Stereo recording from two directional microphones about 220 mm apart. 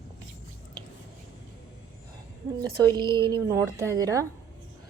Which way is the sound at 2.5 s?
20° right (ahead or behind).